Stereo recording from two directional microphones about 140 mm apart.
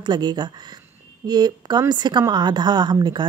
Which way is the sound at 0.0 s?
30° right (ahead or behind).